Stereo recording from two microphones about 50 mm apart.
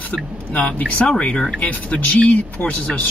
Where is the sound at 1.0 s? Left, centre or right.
Centre.